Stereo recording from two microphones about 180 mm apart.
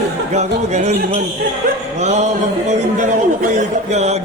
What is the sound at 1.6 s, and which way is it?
Speech, 50° right (ahead or behind).